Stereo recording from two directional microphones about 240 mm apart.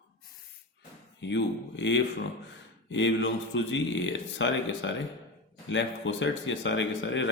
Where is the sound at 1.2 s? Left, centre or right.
Left.